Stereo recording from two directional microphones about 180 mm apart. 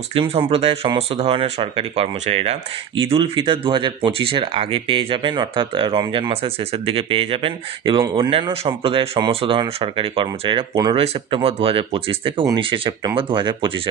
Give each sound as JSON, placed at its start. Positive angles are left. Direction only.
{"t": 0.1, "sound": "speech", "side_deg": -30}